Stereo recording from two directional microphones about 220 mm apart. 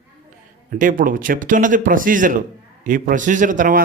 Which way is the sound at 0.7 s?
40° right (ahead or behind).